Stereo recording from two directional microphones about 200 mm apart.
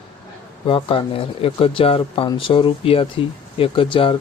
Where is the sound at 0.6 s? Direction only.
25° left (ahead or behind).